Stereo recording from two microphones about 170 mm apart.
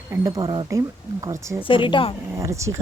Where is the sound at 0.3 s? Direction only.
25° right (ahead or behind).